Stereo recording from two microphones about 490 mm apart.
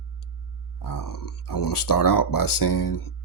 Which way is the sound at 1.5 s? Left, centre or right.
Left.